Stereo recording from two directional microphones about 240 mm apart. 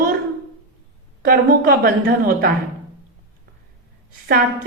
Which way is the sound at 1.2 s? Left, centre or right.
Right.